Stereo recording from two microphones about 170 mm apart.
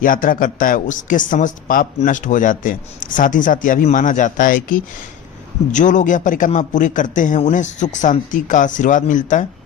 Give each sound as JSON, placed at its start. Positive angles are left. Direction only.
{"t": 0.0, "sound": "speech", "side_deg": 55}